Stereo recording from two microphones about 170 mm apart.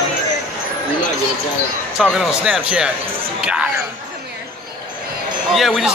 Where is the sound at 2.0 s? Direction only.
5° right (ahead or behind).